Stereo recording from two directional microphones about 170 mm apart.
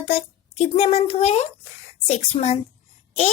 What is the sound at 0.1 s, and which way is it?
A child's voice, 40° left (ahead or behind).